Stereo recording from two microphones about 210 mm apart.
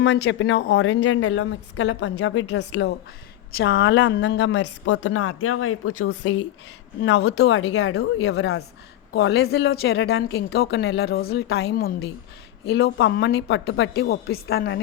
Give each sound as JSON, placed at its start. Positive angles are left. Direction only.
{"t": 0.0, "sound": "a woman's voice", "side_deg": 65}
{"t": 7.2, "sound": "speech", "side_deg": 55}